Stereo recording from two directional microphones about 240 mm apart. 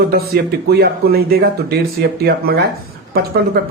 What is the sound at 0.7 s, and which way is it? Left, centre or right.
A man's voice, right.